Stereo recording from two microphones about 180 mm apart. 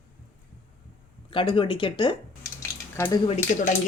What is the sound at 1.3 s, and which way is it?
Speech, 30° left (ahead or behind).